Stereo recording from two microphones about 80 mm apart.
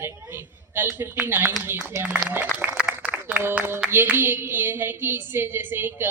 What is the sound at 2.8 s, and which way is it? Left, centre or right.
A woman's voice, centre.